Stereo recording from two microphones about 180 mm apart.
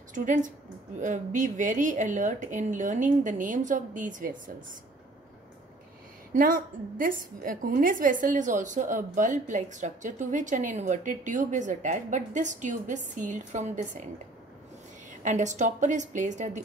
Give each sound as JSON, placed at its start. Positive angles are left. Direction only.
{"t": 0.1, "sound": "a woman's voice", "side_deg": -45}
{"t": 6.3, "sound": "a woman's voice", "side_deg": -50}
{"t": 15.2, "sound": "a woman's voice", "side_deg": -40}